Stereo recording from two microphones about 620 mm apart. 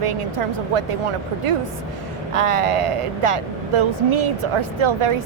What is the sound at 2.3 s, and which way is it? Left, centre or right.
Speech, right.